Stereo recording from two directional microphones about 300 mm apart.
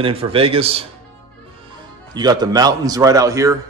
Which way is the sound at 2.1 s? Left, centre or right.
Centre.